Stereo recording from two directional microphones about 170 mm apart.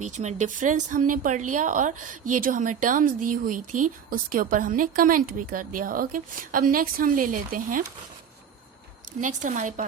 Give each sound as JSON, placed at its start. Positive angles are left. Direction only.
{"t": 0.0, "sound": "speech", "side_deg": -45}
{"t": 9.2, "sound": "speech", "side_deg": -45}